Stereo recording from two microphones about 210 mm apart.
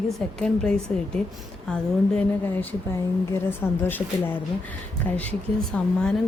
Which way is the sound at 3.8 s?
10° left (ahead or behind).